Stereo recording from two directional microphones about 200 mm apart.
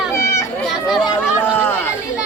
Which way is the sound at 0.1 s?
15° left (ahead or behind).